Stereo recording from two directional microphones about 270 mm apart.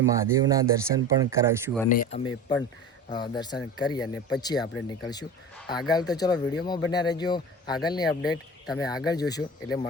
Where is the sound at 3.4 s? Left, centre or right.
Centre.